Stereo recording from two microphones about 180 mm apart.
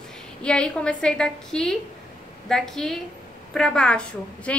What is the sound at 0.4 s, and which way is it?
A woman's voice, 5° left (ahead or behind).